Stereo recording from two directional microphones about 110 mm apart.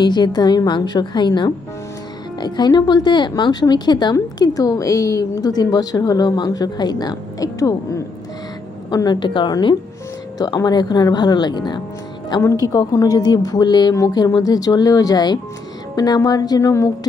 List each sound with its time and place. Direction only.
0.0 s a woman's voice: 40° left (ahead or behind)
12.3 s speech: 30° left (ahead or behind)